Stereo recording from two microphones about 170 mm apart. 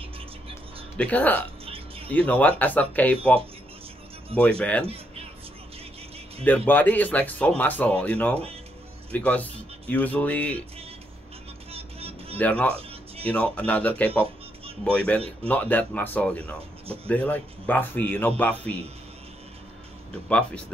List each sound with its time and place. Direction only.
0.9 s speech: 10° left (ahead or behind)
4.4 s speech: 5° left (ahead or behind)
4.8 s speech: 35° right (ahead or behind)
6.4 s speech: 10° left (ahead or behind)
11.7 s music: 35° right (ahead or behind)
12.4 s speech: 10° left (ahead or behind)
16.8 s speech: 35° right (ahead or behind)
17.1 s speech: 10° left (ahead or behind)
20.2 s speech: 5° left (ahead or behind)